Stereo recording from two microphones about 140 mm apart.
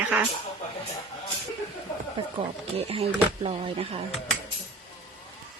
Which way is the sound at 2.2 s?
40° right (ahead or behind).